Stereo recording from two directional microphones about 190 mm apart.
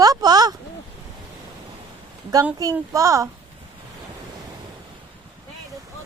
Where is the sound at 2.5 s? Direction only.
15° right (ahead or behind).